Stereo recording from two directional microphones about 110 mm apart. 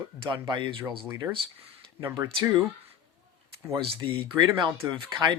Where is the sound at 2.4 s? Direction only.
40° right (ahead or behind).